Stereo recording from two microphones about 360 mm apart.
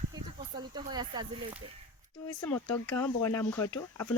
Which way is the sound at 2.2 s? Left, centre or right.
Centre.